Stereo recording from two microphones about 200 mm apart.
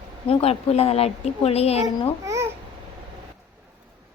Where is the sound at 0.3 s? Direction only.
30° left (ahead or behind).